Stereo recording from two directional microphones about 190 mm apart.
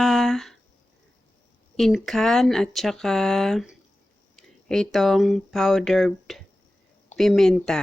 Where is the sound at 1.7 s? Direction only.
Centre (ahead or behind).